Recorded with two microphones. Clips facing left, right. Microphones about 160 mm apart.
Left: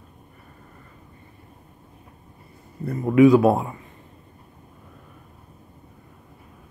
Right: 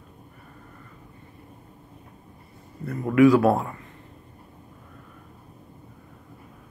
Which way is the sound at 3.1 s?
20° left (ahead or behind).